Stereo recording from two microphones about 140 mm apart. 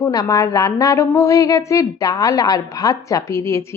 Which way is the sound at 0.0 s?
25° left (ahead or behind).